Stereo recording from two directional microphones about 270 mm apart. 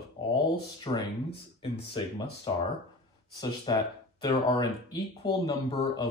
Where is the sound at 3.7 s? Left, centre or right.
Centre.